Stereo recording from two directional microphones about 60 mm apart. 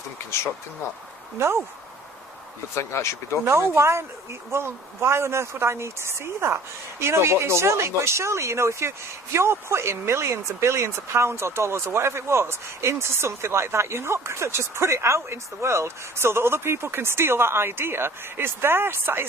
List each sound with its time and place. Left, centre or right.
1.4 s speech: right
2.7 s speech: left
3.4 s speech: right